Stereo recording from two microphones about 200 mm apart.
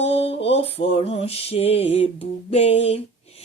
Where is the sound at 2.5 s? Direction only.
30° left (ahead or behind).